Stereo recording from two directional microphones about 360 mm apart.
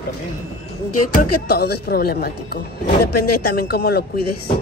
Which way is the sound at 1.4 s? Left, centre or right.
Left.